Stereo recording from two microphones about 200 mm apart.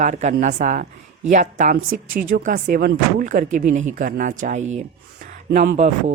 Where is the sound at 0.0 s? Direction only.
35° right (ahead or behind).